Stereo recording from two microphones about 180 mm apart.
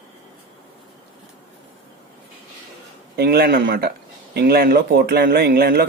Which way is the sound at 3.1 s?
60° right (ahead or behind).